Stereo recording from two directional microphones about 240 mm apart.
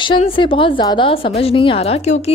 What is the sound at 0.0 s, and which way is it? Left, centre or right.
A woman's voice, left.